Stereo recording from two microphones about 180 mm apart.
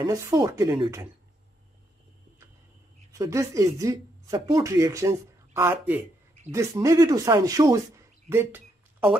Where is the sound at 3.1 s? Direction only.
20° right (ahead or behind).